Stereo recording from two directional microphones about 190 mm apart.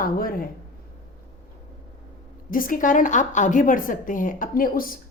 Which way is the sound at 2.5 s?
45° left (ahead or behind).